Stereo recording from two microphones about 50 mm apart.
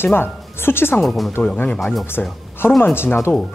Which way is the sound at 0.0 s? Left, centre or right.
Left.